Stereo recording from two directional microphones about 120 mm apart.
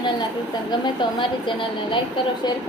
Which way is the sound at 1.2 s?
45° left (ahead or behind).